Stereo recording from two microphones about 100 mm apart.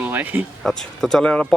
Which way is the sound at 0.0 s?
20° right (ahead or behind).